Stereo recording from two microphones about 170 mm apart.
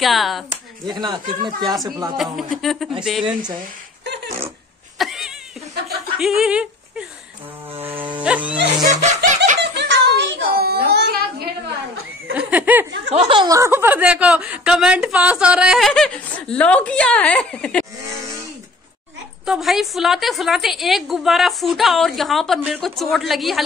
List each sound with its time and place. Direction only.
0.0 s a woman's voice: centre (ahead or behind)
0.8 s speech: 25° right (ahead or behind)
2.5 s a woman's voice: centre (ahead or behind)
4.9 s cat: centre (ahead or behind)
6.1 s speech: 5° right (ahead or behind)
8.2 s a sound: 5° right (ahead or behind)
9.0 s snicker: 45° right (ahead or behind)
9.6 s a sound: 90° right
12.4 s snicker: 10° right (ahead or behind)
13.1 s a woman's voice: 30° right (ahead or behind); by 17.8 s 5° left (ahead or behind)
19.4 s a woman's voice: 5° right (ahead or behind)